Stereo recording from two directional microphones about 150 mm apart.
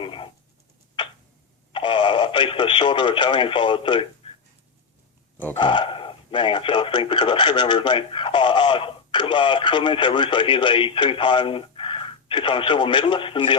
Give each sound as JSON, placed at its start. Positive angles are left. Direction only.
{"t": 0.0, "sound": "a sound", "side_deg": 35}
{"t": 1.7, "sound": "speech", "side_deg": 30}
{"t": 5.5, "sound": "speech", "side_deg": 30}